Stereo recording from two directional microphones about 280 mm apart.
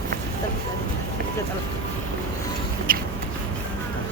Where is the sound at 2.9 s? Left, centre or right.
Right.